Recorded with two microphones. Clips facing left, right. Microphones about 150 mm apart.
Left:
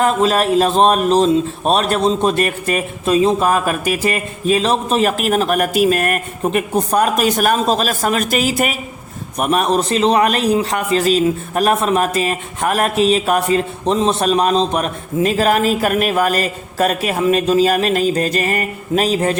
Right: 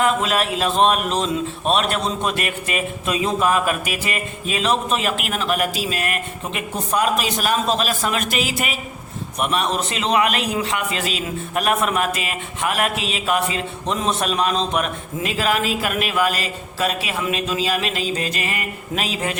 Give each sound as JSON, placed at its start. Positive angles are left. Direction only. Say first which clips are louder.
{"t": 0.0, "sound": "a man's voice", "louder": "left 5 dB", "side_deg": 40}